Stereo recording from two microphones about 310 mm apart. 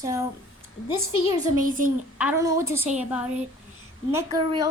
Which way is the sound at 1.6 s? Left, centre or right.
Right.